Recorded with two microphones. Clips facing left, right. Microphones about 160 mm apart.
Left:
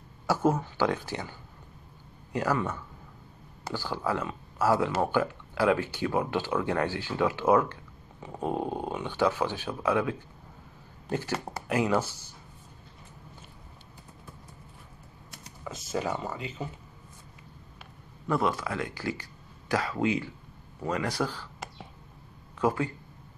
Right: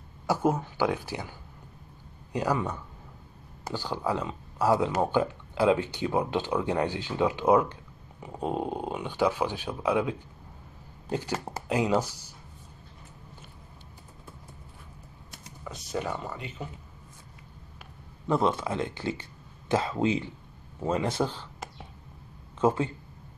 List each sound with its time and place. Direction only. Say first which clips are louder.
0.3 s speech: even; 15° right (ahead or behind)
2.3 s speech: even; 15° right (ahead or behind)
15.6 s speech: left 1 dB; centre (ahead or behind)
18.2 s speech: right 2 dB; 25° right (ahead or behind)
22.6 s speech: right 2 dB; 25° right (ahead or behind)